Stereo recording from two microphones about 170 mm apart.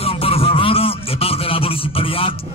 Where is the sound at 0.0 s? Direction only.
35° left (ahead or behind).